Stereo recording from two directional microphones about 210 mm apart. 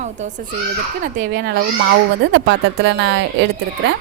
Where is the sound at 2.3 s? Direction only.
60° right (ahead or behind).